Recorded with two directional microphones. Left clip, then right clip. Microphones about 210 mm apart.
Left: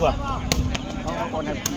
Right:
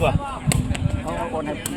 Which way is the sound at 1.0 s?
45° right (ahead or behind).